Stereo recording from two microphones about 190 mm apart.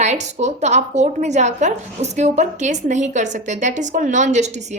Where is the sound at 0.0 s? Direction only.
35° right (ahead or behind).